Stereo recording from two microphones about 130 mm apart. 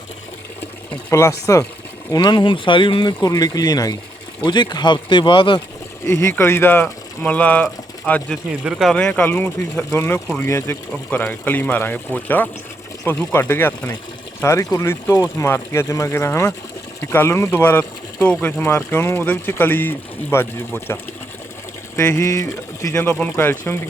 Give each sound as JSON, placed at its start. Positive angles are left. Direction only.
{"t": 1.1, "sound": "speech", "side_deg": 20}
{"t": 2.2, "sound": "speech", "side_deg": 35}
{"t": 3.2, "sound": "speech", "side_deg": 25}
{"t": 6.1, "sound": "speech", "side_deg": 20}
{"t": 8.6, "sound": "speech", "side_deg": 0}
{"t": 23.0, "sound": "speech", "side_deg": 10}